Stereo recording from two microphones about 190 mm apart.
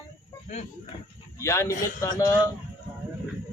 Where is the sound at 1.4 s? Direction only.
15° left (ahead or behind).